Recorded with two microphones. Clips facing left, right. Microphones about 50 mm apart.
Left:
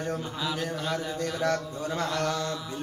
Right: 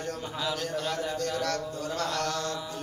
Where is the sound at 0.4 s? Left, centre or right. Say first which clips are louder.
Even; centre.